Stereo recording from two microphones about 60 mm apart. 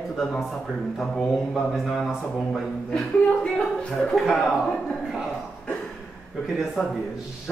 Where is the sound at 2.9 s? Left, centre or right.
Centre.